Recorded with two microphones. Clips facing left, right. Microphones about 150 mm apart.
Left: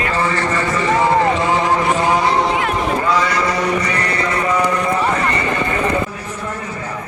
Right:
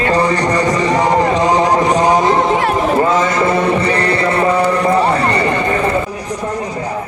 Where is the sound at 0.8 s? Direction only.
20° right (ahead or behind).